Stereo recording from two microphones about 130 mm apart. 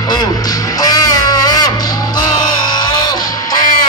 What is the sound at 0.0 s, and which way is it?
Music, 30° left (ahead or behind).